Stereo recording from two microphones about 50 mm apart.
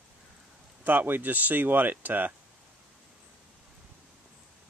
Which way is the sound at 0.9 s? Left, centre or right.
Right.